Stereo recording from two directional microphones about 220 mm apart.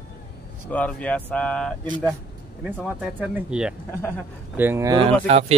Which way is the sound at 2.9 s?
10° right (ahead or behind).